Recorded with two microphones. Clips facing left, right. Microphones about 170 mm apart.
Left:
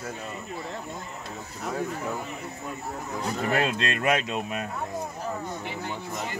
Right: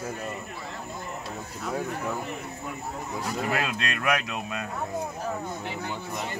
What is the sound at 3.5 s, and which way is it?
Speech, 30° left (ahead or behind).